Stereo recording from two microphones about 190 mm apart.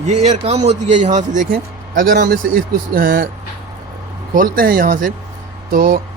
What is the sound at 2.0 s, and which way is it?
Speech, 55° right (ahead or behind).